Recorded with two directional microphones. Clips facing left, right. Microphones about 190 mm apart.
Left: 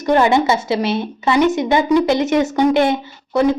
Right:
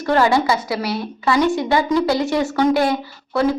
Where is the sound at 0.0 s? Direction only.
20° left (ahead or behind).